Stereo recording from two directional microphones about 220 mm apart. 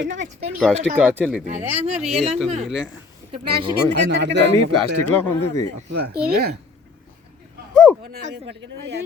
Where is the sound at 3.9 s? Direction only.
50° right (ahead or behind).